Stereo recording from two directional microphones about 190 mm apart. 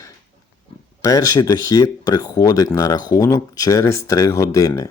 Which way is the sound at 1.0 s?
15° left (ahead or behind).